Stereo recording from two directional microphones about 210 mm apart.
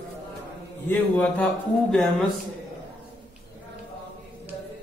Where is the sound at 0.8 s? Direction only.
5° left (ahead or behind).